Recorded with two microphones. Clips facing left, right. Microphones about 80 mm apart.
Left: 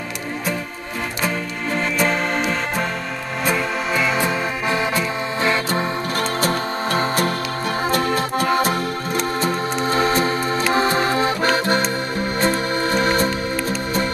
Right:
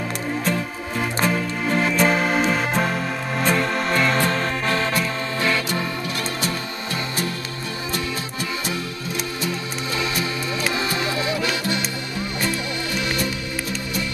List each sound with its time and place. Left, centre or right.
1.2 s music: centre
5.4 s music: left
6.4 s music: left
7.9 s accordion: left
10.7 s music: left